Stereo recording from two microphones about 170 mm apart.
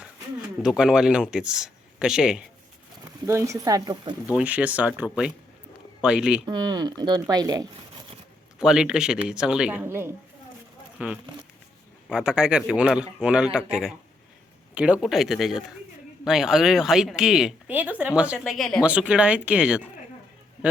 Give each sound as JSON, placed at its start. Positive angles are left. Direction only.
{"t": 0.6, "sound": "speech", "side_deg": -5}
{"t": 3.2, "sound": "speech", "side_deg": -15}
{"t": 4.4, "sound": "speech", "side_deg": -10}
{"t": 6.4, "sound": "speech", "side_deg": -25}
{"t": 8.5, "sound": "speech", "side_deg": -5}